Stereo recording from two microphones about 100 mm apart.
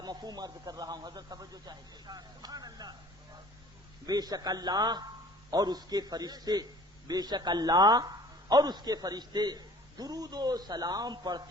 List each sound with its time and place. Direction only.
0.0 s a man's voice: 45° right (ahead or behind)
4.0 s a man's voice: 40° right (ahead or behind)